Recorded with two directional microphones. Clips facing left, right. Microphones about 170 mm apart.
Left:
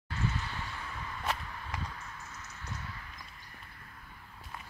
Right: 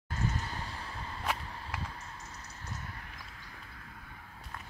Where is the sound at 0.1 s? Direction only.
40° right (ahead or behind).